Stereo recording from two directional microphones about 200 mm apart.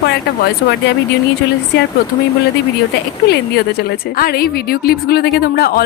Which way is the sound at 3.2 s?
55° left (ahead or behind).